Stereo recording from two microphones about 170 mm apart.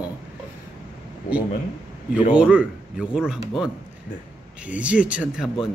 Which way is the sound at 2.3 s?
5° right (ahead or behind).